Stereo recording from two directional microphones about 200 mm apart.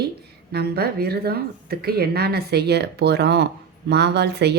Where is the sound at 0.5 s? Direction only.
50° right (ahead or behind).